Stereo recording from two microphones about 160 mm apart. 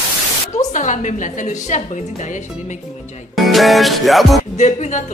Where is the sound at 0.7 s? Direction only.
50° left (ahead or behind).